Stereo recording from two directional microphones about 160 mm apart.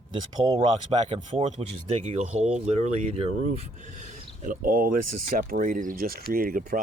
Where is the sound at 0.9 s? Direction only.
30° right (ahead or behind).